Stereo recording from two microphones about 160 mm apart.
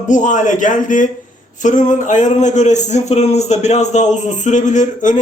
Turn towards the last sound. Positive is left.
turn(degrees=50)  # may be behind; listen again after turning